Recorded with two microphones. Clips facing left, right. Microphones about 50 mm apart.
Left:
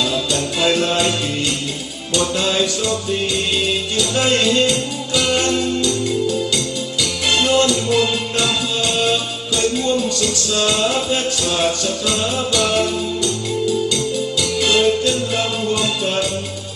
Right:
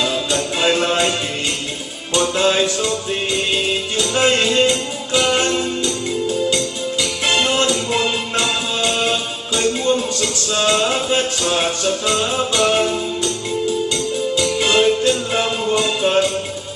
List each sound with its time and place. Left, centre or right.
0.0 s music: right
2.1 s music: right
14.4 s music: centre